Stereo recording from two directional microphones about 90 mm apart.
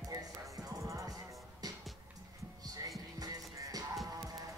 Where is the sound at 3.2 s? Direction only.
45° right (ahead or behind).